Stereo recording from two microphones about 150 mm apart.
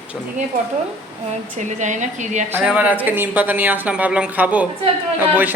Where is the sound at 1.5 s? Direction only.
55° right (ahead or behind).